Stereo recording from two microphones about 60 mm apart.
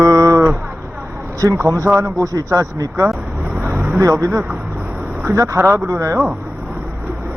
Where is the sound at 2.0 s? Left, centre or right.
Right.